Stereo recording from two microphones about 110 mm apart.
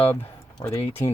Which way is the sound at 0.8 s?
20° left (ahead or behind).